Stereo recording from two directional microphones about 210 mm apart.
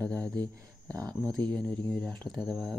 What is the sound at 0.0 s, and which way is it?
Speech, 5° left (ahead or behind).